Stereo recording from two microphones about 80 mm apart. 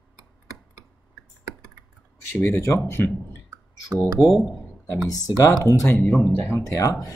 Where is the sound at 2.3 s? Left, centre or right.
Left.